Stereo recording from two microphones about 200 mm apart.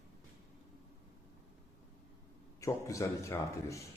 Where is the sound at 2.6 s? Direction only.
15° left (ahead or behind).